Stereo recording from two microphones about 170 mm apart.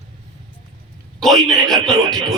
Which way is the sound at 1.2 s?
Centre (ahead or behind).